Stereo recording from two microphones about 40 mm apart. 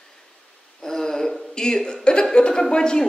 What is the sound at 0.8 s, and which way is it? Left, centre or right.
Speech, centre.